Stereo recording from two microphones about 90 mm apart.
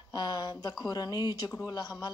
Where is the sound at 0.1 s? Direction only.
50° left (ahead or behind).